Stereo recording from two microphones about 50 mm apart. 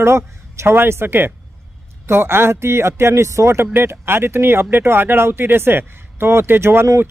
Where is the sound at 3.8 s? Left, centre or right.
Right.